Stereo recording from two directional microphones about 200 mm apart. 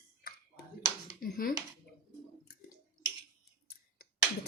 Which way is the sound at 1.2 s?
45° left (ahead or behind).